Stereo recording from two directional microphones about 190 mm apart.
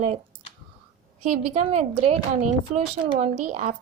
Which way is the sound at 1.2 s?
35° right (ahead or behind).